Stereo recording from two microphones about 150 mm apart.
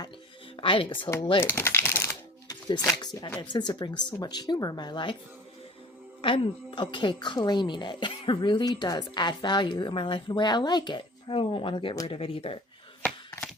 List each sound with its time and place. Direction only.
0.5 s speech: 35° left (ahead or behind)
1.4 s speech: 15° left (ahead or behind)
2.5 s speech: 25° left (ahead or behind)
6.2 s speech: 35° left (ahead or behind)